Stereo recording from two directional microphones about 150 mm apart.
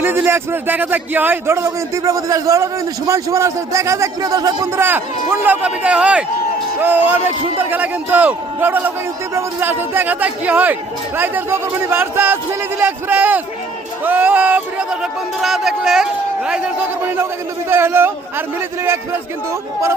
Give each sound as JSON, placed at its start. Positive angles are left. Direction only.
{"t": 0.0, "sound": "a man's voice", "side_deg": -15}
{"t": 17.7, "sound": "a man's voice", "side_deg": -15}